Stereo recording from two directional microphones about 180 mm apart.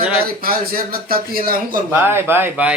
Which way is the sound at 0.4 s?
55° right (ahead or behind).